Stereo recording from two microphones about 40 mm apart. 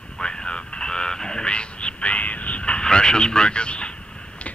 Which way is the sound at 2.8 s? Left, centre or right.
Centre.